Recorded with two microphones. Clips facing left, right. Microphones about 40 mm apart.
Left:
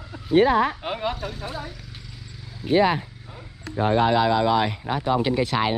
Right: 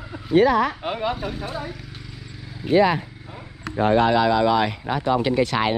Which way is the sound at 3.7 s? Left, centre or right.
Right.